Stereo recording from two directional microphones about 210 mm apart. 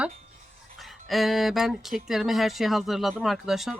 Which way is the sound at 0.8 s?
Centre (ahead or behind).